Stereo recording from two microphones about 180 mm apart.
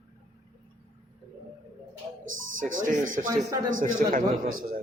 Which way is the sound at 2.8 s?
45° right (ahead or behind).